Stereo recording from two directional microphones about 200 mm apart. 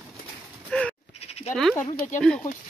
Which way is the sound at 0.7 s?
5° left (ahead or behind).